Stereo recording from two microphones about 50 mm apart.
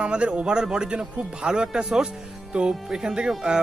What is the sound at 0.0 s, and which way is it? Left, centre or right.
Speech, right.